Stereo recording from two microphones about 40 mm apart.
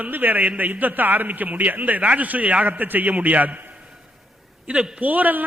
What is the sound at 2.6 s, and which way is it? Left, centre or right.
A man's voice, right.